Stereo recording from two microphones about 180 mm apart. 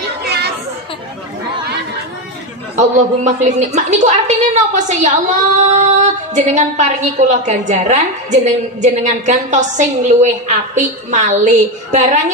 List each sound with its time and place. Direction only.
0.2 s chatter: 65° right (ahead or behind)
2.8 s a woman's voice: 40° right (ahead or behind)